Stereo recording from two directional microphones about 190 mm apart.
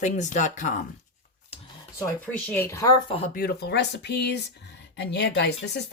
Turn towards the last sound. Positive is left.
turn(degrees=60)  # may be behind; listen again after turning